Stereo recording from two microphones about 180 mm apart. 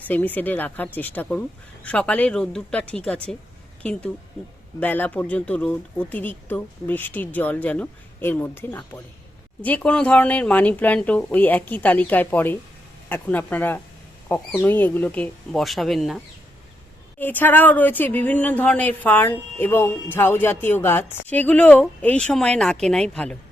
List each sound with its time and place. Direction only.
0.1 s a woman's voice: 10° left (ahead or behind)
17.2 s a woman's voice: 10° left (ahead or behind)